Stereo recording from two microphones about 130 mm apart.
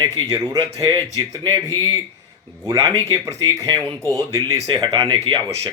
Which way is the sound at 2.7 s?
25° right (ahead or behind).